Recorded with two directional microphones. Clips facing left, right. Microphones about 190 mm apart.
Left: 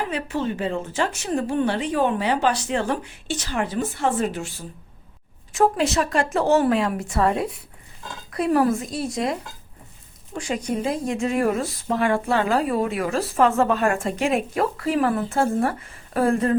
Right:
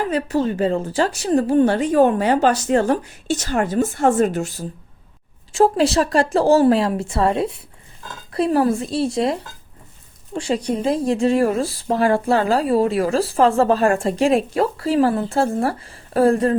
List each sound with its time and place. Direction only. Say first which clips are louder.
0.1 s speech: right 6 dB; 40° right (ahead or behind)
5.5 s speech: right 4 dB; 30° right (ahead or behind)